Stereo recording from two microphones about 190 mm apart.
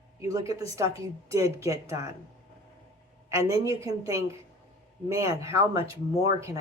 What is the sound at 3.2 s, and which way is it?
A woman's voice, 15° right (ahead or behind).